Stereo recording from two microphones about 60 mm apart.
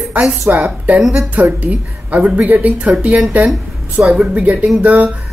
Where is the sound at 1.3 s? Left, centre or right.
Right.